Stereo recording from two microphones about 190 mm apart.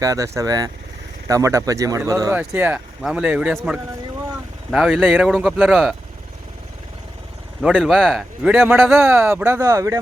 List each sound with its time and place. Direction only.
0.0 s speech: 15° right (ahead or behind)
2.2 s a man's voice: 5° right (ahead or behind)
7.6 s a man's voice: centre (ahead or behind)
8.5 s speech: 10° right (ahead or behind)